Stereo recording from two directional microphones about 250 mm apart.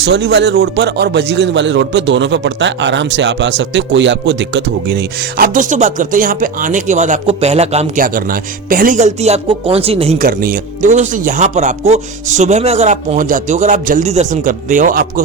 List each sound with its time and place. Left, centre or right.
0.0 s speech: right
5.5 s speech: right
10.2 s speech: right